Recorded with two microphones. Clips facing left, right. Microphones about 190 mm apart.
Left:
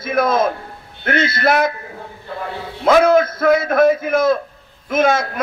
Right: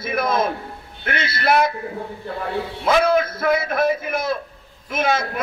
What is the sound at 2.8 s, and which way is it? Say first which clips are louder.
A man's voice: left 6 dB; 50° left (ahead or behind).